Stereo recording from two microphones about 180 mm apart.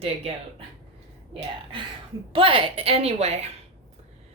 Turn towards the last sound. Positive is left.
turn(degrees=-35)  # may be behind; listen again after turning